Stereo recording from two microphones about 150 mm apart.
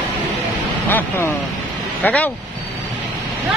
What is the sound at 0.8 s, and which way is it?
Speech, 15° left (ahead or behind).